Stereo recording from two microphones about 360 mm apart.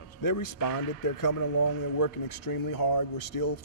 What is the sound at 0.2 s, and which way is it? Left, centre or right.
Speech, left.